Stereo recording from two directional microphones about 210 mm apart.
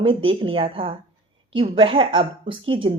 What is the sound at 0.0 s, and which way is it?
Speech, 25° right (ahead or behind).